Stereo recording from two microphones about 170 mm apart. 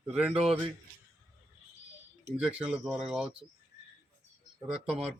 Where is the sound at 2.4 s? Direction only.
5° right (ahead or behind).